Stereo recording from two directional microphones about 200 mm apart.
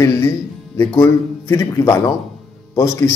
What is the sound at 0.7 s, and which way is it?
Speech, 15° left (ahead or behind).